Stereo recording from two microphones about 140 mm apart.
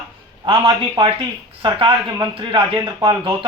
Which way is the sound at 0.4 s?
40° right (ahead or behind).